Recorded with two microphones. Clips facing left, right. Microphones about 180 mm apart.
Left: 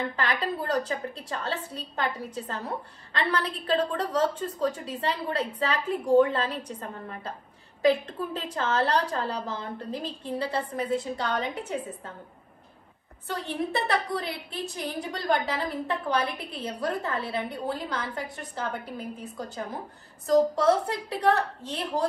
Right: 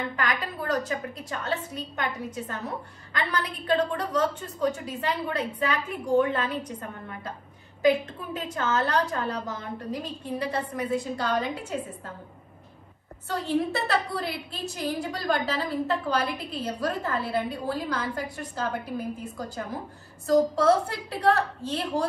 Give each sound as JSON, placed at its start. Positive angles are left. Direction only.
{"t": 0.1, "sound": "a woman's voice", "side_deg": 30}
{"t": 13.3, "sound": "a woman's voice", "side_deg": 20}